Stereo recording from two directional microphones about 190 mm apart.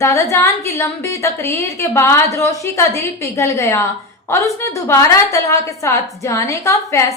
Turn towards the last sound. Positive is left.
turn(degrees=15)  # may be behind; listen again after turning